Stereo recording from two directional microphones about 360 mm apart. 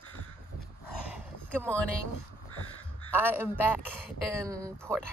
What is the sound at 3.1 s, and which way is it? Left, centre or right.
A man's voice, centre.